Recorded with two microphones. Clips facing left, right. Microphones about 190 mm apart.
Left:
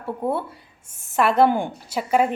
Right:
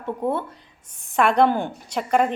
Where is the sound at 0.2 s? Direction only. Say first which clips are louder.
Left 1 dB; 10° left (ahead or behind).